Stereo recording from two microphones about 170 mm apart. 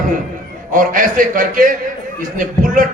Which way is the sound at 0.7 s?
50° right (ahead or behind).